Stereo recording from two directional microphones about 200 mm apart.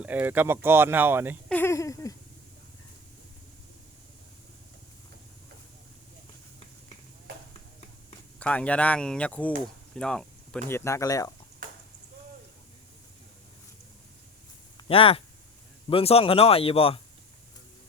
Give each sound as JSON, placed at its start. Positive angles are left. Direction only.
{"t": 0.0, "sound": "speech", "side_deg": -10}
{"t": 1.5, "sound": "a sound", "side_deg": 10}
{"t": 8.4, "sound": "speech", "side_deg": 5}
{"t": 14.8, "sound": "speech", "side_deg": 30}